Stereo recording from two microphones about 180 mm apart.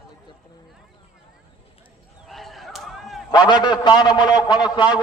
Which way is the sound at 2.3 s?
Centre (ahead or behind).